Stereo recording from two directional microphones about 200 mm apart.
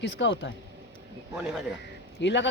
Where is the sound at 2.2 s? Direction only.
60° left (ahead or behind).